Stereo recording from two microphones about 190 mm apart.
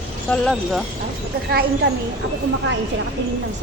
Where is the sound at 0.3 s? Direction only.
5° left (ahead or behind).